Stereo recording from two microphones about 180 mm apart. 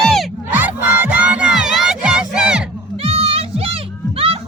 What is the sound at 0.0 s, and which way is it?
Crowd, centre (ahead or behind).